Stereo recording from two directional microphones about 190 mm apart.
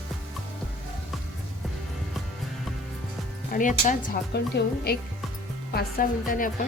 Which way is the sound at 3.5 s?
45° left (ahead or behind).